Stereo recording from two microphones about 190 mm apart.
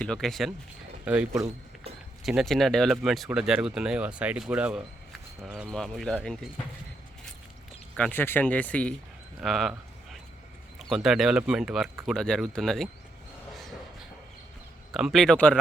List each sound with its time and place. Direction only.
0.0 s speech: 5° left (ahead or behind)
2.2 s speech: centre (ahead or behind)
7.9 s speech: 10° left (ahead or behind)
9.4 s a sound: centre (ahead or behind)
10.8 s speech: centre (ahead or behind)
14.9 s speech: centre (ahead or behind)